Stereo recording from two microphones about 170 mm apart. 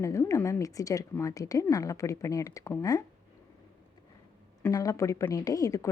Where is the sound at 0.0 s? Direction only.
15° left (ahead or behind).